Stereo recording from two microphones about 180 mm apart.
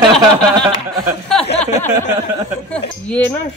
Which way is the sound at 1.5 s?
40° left (ahead or behind).